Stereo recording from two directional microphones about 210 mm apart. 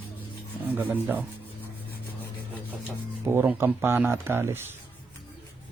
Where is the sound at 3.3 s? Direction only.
10° right (ahead or behind).